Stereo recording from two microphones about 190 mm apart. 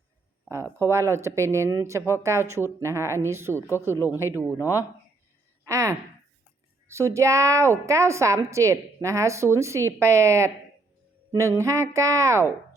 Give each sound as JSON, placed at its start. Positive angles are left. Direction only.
{"t": 0.4, "sound": "a woman's voice", "side_deg": -15}
{"t": 3.8, "sound": "speech", "side_deg": 15}
{"t": 4.2, "sound": "a woman's voice", "side_deg": -10}
{"t": 4.4, "sound": "speech", "side_deg": 15}
{"t": 5.6, "sound": "a sound", "side_deg": -15}
{"t": 6.8, "sound": "a woman's voice", "side_deg": -15}